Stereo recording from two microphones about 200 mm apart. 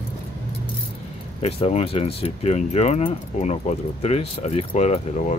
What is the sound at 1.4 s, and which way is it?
Speech, 30° left (ahead or behind).